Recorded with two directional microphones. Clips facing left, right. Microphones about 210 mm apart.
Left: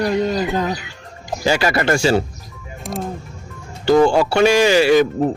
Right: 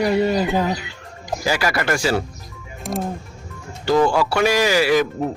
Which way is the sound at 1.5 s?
25° left (ahead or behind).